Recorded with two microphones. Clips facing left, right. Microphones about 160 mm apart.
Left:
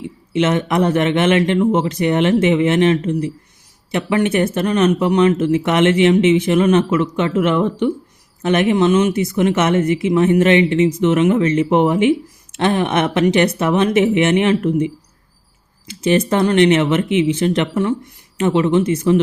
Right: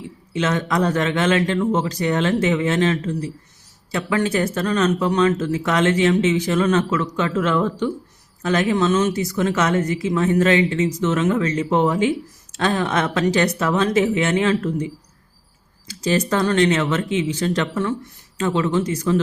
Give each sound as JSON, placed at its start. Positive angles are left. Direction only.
{"t": 0.3, "sound": "speech", "side_deg": 25}
{"t": 15.9, "sound": "speech", "side_deg": 25}